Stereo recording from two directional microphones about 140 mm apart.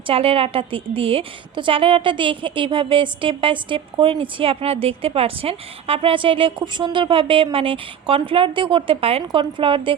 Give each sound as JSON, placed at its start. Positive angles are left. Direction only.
{"t": 0.1, "sound": "a woman's voice", "side_deg": -45}